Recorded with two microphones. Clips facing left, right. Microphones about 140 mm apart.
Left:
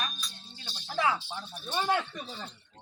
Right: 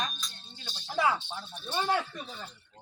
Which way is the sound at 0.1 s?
5° left (ahead or behind).